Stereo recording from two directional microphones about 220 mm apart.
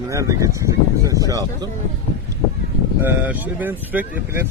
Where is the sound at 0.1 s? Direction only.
15° right (ahead or behind).